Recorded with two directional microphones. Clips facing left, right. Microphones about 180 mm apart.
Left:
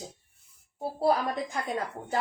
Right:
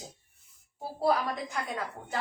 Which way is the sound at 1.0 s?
30° left (ahead or behind).